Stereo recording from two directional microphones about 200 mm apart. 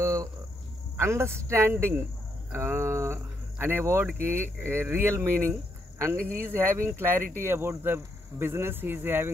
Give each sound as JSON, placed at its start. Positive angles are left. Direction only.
{"t": 0.0, "sound": "cricket", "side_deg": -15}
{"t": 0.9, "sound": "speech", "side_deg": -15}
{"t": 6.1, "sound": "speech", "side_deg": -45}
{"t": 6.5, "sound": "speech", "side_deg": -10}